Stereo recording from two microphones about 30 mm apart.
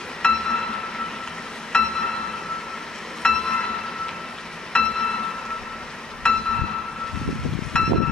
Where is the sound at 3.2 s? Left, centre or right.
Left.